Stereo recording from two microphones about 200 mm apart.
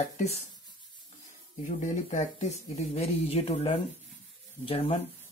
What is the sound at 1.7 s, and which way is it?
Speech, 35° left (ahead or behind).